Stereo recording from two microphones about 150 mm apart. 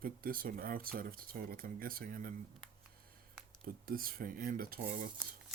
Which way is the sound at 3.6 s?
75° right (ahead or behind).